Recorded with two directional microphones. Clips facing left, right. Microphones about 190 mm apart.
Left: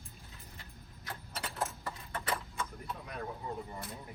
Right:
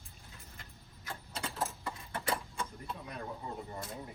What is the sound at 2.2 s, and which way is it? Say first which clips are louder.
Horse: right 1 dB; 30° right (ahead or behind).